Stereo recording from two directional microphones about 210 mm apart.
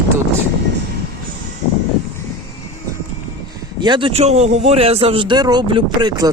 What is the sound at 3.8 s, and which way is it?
A man's voice, 20° right (ahead or behind).